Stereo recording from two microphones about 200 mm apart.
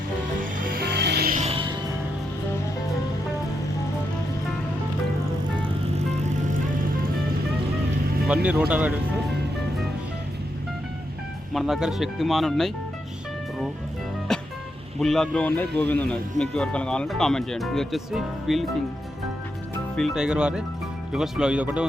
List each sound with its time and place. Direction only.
0.3 s music: 45° right (ahead or behind)
1.5 s music: 25° right (ahead or behind)
8.3 s speech: 5° right (ahead or behind)
11.5 s speech: centre (ahead or behind)
14.3 s music: centre (ahead or behind)
15.0 s speech: centre (ahead or behind)
20.0 s speech: centre (ahead or behind)